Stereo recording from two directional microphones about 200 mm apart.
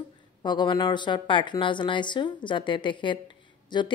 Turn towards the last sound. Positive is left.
turn(degrees=25)  # may be behind; listen again after turning